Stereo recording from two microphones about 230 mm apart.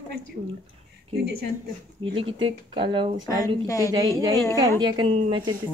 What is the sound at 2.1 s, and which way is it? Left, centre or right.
Speech, right.